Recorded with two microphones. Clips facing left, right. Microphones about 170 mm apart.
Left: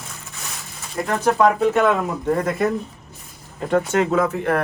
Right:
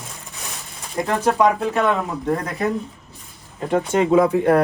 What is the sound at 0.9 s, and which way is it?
Speech, 15° right (ahead or behind).